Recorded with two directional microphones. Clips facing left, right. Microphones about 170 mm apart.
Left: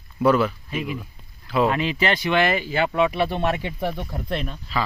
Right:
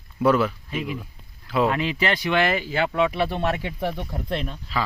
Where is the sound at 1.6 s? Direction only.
25° left (ahead or behind); by 4.9 s centre (ahead or behind).